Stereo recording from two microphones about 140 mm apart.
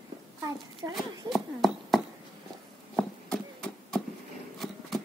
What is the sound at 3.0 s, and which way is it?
Horse, 5° left (ahead or behind).